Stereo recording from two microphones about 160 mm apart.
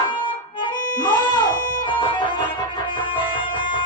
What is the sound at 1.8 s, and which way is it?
Music, 30° left (ahead or behind).